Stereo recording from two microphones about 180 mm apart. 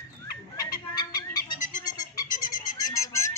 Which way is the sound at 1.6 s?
45° left (ahead or behind).